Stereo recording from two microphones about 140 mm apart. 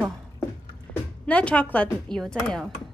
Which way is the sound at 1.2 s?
10° left (ahead or behind).